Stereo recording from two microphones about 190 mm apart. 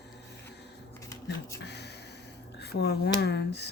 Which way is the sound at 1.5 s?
60° left (ahead or behind).